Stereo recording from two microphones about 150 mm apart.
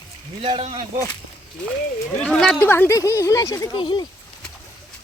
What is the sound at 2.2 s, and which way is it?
Speech, 5° left (ahead or behind).